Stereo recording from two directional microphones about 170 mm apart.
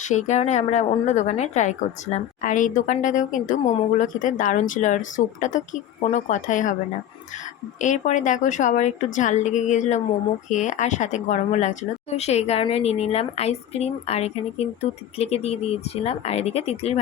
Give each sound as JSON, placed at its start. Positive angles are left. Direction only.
{"t": 0.0, "sound": "speech", "side_deg": 45}
{"t": 7.8, "sound": "a woman's voice", "side_deg": 45}